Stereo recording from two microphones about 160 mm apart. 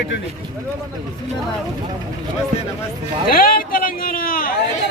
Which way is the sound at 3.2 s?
65° left (ahead or behind).